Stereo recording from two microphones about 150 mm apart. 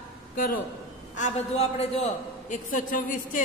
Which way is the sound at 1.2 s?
50° left (ahead or behind).